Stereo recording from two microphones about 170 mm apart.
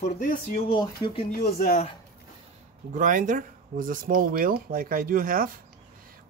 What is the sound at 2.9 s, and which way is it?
Speech, 50° right (ahead or behind).